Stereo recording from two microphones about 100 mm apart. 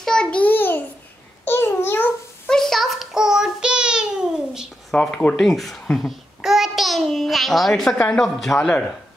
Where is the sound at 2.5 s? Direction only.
5° left (ahead or behind).